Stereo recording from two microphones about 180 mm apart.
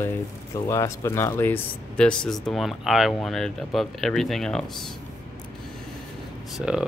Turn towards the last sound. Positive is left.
turn(degrees=-5)  # may be behind; listen again after turning